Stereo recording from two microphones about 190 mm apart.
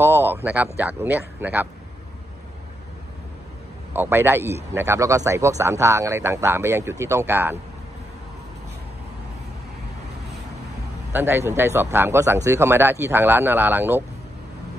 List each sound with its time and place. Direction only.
0.0 s speech: 10° right (ahead or behind)
3.9 s speech: 10° right (ahead or behind)
11.1 s speech: 10° right (ahead or behind)